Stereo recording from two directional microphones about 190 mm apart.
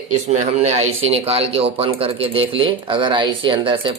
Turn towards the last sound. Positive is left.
turn(degrees=-25)  # may be behind; listen again after turning